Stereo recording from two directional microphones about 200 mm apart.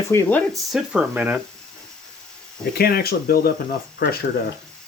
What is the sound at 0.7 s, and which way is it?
Speech, 5° right (ahead or behind).